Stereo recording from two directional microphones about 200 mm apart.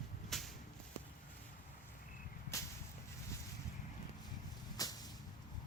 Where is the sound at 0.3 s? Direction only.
Centre (ahead or behind).